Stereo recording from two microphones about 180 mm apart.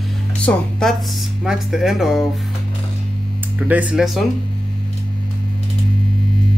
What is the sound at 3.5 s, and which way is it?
Speech, 10° right (ahead or behind).